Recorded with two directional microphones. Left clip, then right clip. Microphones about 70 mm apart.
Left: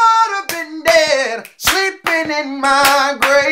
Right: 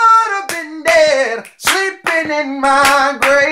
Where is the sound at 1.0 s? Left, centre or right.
Right.